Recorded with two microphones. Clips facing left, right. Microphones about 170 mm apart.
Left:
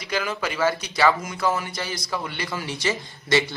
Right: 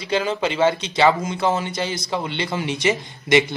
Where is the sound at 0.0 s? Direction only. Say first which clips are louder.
Right 5 dB; 25° right (ahead or behind).